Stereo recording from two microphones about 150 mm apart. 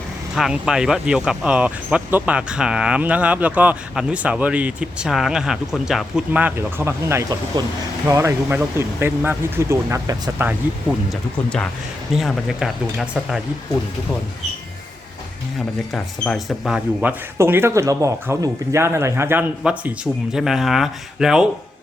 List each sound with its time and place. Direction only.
0.3 s speech: 5° right (ahead or behind)
11.1 s speech: 5° left (ahead or behind)
15.9 s speech: 5° left (ahead or behind)